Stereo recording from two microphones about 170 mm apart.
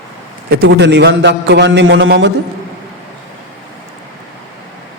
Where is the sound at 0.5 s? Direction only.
85° right.